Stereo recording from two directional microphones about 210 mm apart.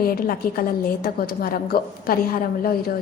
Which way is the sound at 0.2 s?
45° left (ahead or behind).